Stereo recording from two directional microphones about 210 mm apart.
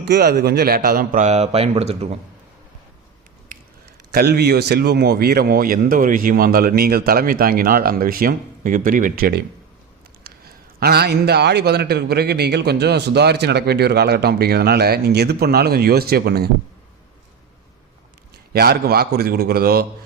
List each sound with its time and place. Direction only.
0.0 s a man's voice: 50° right (ahead or behind); by 2.0 s 30° right (ahead or behind)
4.1 s a man's voice: 50° right (ahead or behind)
18.5 s a man's voice: 50° right (ahead or behind)